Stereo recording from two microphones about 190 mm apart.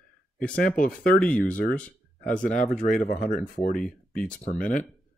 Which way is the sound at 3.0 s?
45° left (ahead or behind).